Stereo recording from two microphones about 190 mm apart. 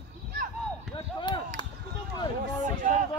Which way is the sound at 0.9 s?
25° left (ahead or behind).